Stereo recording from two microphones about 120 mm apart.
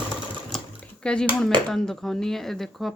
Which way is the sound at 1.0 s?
5° left (ahead or behind).